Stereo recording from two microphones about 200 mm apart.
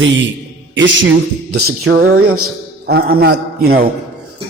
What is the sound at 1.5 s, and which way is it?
A man's voice, 50° right (ahead or behind).